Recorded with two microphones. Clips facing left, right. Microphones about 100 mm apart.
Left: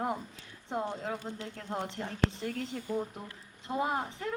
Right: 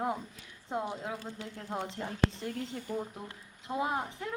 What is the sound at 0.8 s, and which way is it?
A woman's voice, 15° right (ahead or behind).